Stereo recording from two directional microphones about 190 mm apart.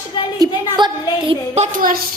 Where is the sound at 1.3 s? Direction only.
35° right (ahead or behind).